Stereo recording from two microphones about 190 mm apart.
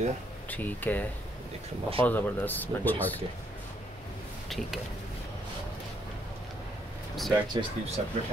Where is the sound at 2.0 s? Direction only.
10° left (ahead or behind).